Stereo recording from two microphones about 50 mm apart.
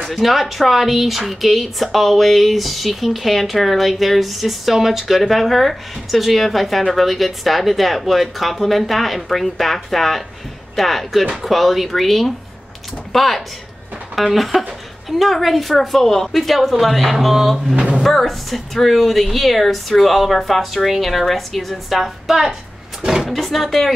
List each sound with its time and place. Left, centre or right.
0.0 s a woman's voice: centre
17.7 s drawer open or close: centre
18.0 s a woman's voice: centre